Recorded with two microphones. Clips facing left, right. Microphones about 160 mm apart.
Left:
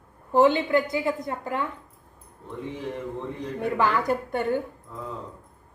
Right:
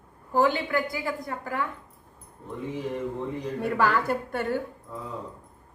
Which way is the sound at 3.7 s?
20° left (ahead or behind).